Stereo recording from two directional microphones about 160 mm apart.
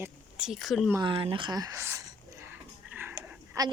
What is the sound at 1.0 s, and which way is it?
Speech, 30° right (ahead or behind).